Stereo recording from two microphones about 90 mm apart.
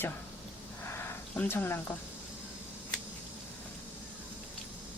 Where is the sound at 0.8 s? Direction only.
25° left (ahead or behind).